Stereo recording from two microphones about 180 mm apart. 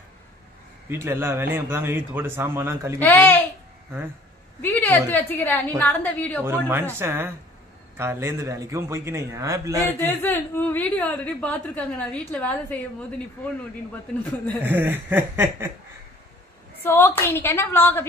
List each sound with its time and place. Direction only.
0.8 s speech: 15° right (ahead or behind)
3.0 s a woman's voice: 10° left (ahead or behind)
4.6 s a woman's voice: 10° left (ahead or behind)
6.4 s speech: 10° right (ahead or behind)
10.0 s a woman's voice: 10° left (ahead or behind)
14.6 s speech: 10° right (ahead or behind)
16.8 s a woman's voice: 10° left (ahead or behind)